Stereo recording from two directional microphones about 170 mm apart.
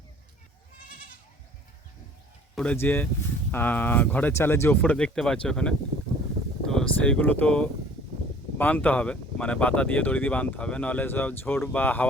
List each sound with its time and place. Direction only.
2.6 s speech: 10° left (ahead or behind)